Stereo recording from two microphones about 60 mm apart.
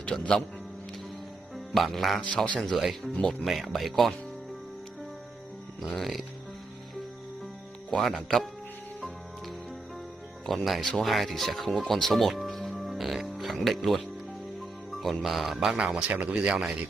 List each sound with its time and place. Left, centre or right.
0.0 s speech: centre
1.7 s speech: centre
2.2 s speech: centre
2.6 s speech: centre
5.8 s speech: centre
7.9 s speech: centre
10.4 s speech: centre
14.9 s music: centre
15.8 s speech: centre